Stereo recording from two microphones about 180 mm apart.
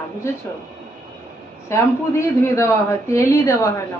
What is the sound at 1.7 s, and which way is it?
A child's voice, 15° left (ahead or behind).